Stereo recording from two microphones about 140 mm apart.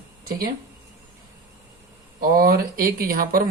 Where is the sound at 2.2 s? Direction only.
90° right.